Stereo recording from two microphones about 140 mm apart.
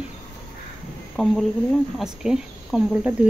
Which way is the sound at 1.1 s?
Centre (ahead or behind).